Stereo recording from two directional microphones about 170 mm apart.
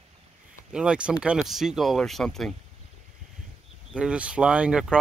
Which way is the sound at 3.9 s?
5° right (ahead or behind).